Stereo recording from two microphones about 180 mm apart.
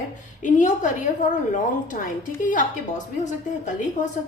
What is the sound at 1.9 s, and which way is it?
Speech, 45° left (ahead or behind).